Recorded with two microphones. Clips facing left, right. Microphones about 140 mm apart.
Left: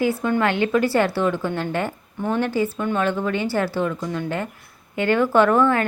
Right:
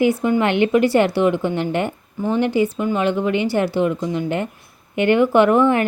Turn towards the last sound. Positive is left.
turn(degrees=-20)  # may be behind; listen again after turning